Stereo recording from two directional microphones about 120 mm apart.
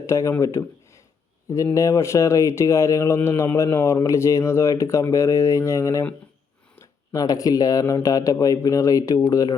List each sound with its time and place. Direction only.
0.0 s speech: 25° left (ahead or behind)